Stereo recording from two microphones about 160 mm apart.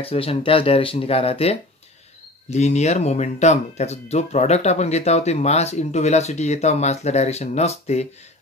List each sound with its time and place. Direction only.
0.0 s speech: 35° left (ahead or behind)